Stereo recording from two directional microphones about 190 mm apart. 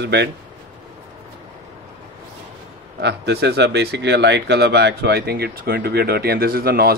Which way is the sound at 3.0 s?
60° right (ahead or behind).